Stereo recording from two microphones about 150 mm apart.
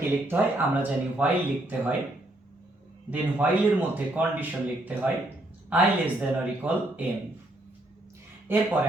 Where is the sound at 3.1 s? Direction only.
10° right (ahead or behind).